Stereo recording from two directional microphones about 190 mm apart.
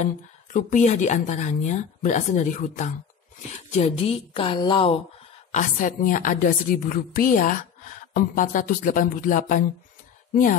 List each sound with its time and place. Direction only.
0.0 s a woman's voice: 40° left (ahead or behind); by 4.9 s 25° left (ahead or behind)
5.5 s a woman's voice: 40° left (ahead or behind)